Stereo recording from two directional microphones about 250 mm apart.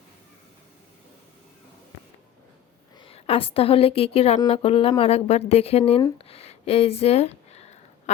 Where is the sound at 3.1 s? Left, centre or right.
Left.